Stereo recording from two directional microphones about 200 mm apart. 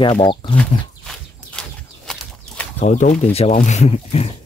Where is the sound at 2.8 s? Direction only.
35° left (ahead or behind).